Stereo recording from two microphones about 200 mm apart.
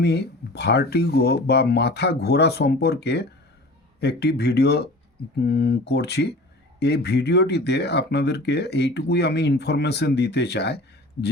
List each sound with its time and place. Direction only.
0.0 s speech: 55° left (ahead or behind)